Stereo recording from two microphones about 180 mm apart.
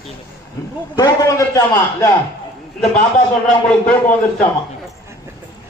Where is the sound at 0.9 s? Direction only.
20° left (ahead or behind).